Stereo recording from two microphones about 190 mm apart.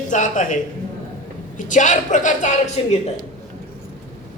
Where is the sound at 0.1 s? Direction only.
40° left (ahead or behind).